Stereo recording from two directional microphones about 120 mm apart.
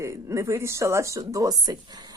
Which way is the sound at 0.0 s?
25° right (ahead or behind).